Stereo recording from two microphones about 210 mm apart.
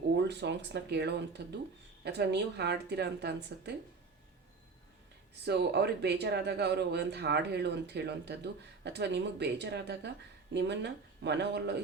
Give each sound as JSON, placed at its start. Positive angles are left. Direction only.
{"t": 0.2, "sound": "speech", "side_deg": -55}
{"t": 5.5, "sound": "speech", "side_deg": -50}